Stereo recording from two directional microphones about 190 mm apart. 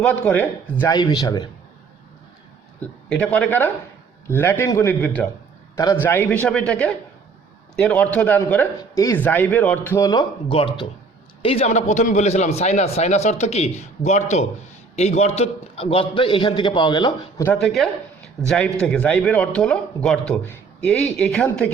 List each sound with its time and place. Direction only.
0.0 s speech: 5° left (ahead or behind)
0.9 s a man's voice: 20° left (ahead or behind)
2.8 s a man's voice: 10° left (ahead or behind)
17.4 s speech: 5° left (ahead or behind)